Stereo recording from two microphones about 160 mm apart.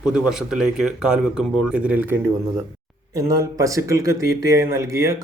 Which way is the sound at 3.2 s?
20° right (ahead or behind).